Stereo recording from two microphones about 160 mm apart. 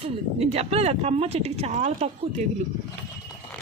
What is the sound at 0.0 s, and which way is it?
Speech, 40° right (ahead or behind).